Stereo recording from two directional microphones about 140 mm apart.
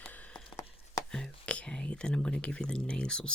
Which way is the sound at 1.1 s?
5° left (ahead or behind).